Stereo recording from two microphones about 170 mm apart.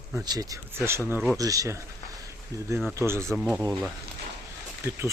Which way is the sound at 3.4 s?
5° right (ahead or behind).